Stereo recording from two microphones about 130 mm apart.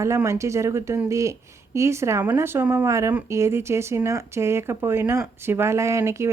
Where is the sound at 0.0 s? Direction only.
20° right (ahead or behind).